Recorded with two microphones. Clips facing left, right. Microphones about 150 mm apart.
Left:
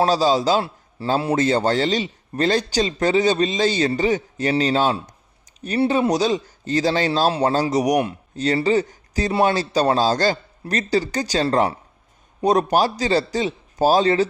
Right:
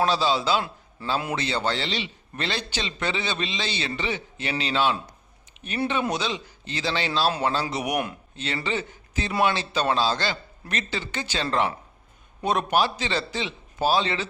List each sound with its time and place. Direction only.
0.0 s a man's voice: 40° left (ahead or behind)